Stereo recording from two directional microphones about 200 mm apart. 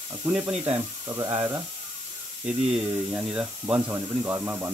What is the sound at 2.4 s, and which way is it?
Speech, 5° right (ahead or behind).